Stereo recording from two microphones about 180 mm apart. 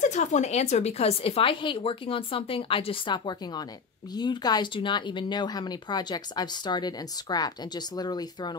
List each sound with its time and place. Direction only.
0.0 s speech: 40° left (ahead or behind); by 8.5 s 25° left (ahead or behind)